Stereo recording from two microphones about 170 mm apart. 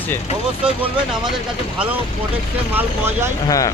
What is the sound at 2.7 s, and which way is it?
Speech, 10° right (ahead or behind).